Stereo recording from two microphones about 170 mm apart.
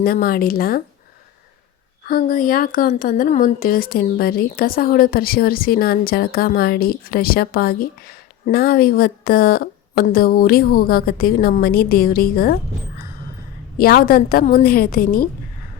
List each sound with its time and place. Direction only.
0.0 s a woman's voice: 60° left (ahead or behind)
2.0 s a woman's voice: 60° left (ahead or behind)
13.7 s a woman's voice: 60° left (ahead or behind)